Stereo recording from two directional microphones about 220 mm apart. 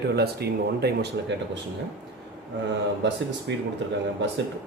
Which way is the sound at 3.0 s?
55° right (ahead or behind).